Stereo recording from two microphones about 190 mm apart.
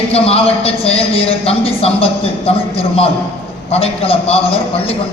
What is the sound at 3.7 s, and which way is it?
A man's voice, 30° left (ahead or behind).